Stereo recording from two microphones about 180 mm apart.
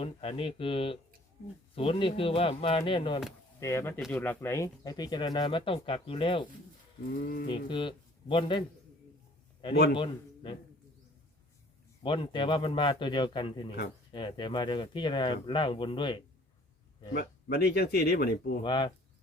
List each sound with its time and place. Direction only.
0.0 s speech: 30° left (ahead or behind)
3.6 s speech: 15° left (ahead or behind)
7.2 s mantra: 50° left (ahead or behind)
7.4 s speech: 25° left (ahead or behind)
9.9 s speech: 25° left (ahead or behind)
12.0 s speech: 25° left (ahead or behind)
17.2 s speech: 60° left (ahead or behind)
18.6 s speech: 25° left (ahead or behind)